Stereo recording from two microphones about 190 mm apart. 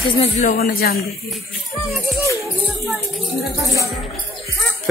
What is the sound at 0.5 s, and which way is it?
Speech, 50° left (ahead or behind).